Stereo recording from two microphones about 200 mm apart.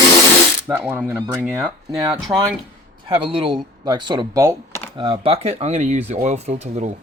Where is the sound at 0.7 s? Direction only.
5° right (ahead or behind).